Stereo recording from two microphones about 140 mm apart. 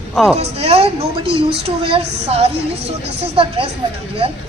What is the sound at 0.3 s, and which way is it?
A woman's voice, 45° right (ahead or behind).